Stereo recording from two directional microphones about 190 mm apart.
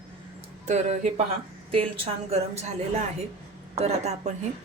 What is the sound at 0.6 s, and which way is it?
Speech, 40° right (ahead or behind).